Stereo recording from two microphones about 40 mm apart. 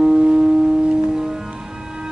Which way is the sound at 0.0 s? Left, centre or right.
Right.